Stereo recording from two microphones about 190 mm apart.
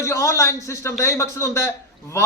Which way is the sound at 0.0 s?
15° left (ahead or behind).